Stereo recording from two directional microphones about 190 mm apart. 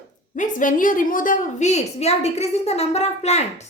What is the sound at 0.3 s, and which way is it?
A woman's voice, 45° left (ahead or behind).